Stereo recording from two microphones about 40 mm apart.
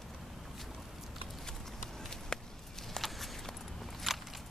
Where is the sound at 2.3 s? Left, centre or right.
Centre.